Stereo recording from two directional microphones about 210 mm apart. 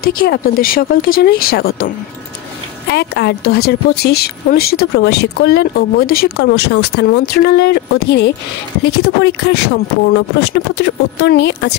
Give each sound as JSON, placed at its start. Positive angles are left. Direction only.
{"t": 0.0, "sound": "speech", "side_deg": 45}
{"t": 2.9, "sound": "speech", "side_deg": 55}